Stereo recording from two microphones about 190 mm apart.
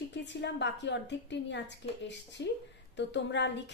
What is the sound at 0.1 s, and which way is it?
A woman's voice, 65° left (ahead or behind).